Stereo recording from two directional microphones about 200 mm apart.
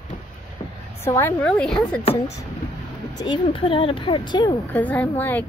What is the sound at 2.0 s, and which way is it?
Speech, 30° left (ahead or behind).